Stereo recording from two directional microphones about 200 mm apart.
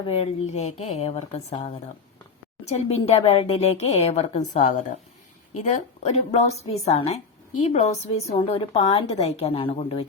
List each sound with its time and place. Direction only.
0.0 s a woman's voice: 30° left (ahead or behind)